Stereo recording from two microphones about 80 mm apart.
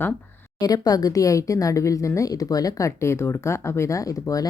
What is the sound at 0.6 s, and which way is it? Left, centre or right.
A woman's voice, left.